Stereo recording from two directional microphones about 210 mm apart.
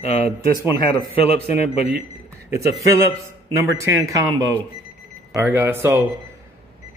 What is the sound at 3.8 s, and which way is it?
A man's voice, 15° right (ahead or behind).